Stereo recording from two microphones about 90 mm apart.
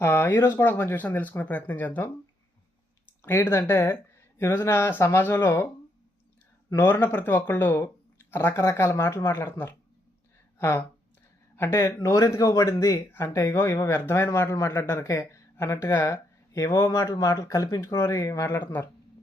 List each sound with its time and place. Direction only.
0.0 s speech: 25° left (ahead or behind)
3.2 s speech: 30° left (ahead or behind)
6.8 s speech: 20° left (ahead or behind)
11.9 s speech: 35° left (ahead or behind)